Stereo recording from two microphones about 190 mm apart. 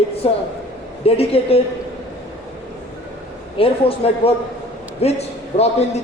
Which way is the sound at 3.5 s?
30° left (ahead or behind).